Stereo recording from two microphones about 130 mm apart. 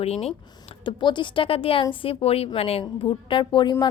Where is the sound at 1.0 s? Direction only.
35° left (ahead or behind).